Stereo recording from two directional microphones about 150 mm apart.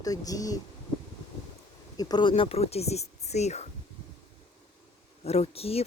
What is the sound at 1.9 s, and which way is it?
Speech, 30° left (ahead or behind).